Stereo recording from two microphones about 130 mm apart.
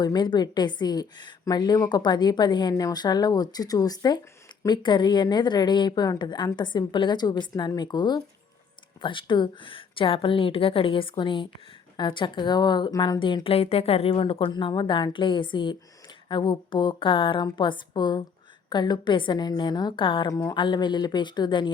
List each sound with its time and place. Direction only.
0.0 s a woman's voice: 35° left (ahead or behind)